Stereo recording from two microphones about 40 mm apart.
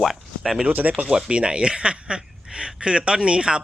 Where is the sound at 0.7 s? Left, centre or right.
Right.